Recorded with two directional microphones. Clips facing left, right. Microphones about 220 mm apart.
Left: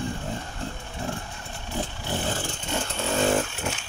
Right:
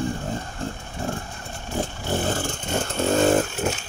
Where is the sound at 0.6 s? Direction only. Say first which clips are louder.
Right 3 dB; 45° right (ahead or behind).